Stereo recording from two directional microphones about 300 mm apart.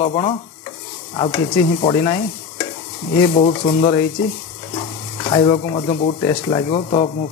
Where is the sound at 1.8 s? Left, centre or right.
Centre.